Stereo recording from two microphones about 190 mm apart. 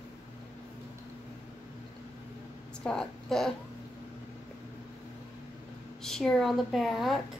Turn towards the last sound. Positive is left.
turn(degrees=0)  # may be behind; listen again after turning